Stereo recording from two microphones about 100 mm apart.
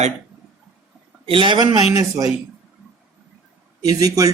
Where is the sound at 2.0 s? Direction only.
40° right (ahead or behind).